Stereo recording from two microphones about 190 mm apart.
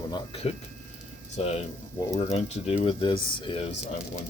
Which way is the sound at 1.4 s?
35° left (ahead or behind).